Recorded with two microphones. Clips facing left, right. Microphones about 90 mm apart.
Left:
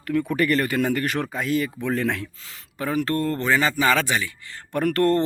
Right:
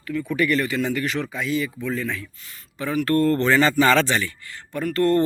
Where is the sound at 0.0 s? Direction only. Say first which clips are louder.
Left 1 dB; 60° left (ahead or behind).